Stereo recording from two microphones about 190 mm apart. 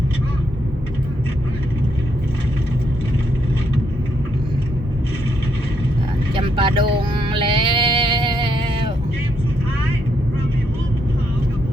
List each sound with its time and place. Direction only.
6.3 s music: 25° right (ahead or behind)